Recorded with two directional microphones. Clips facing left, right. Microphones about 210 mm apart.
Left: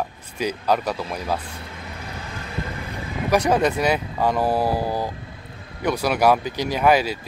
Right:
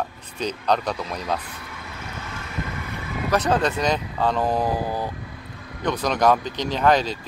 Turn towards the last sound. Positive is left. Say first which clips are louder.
# left 1 dB
turn(degrees=10)  # may be behind; listen again after turning